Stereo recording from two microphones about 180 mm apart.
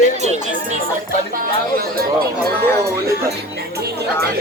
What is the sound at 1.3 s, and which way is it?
Speech, 55° right (ahead or behind).